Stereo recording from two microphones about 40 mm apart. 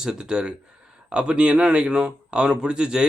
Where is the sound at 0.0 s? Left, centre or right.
Centre.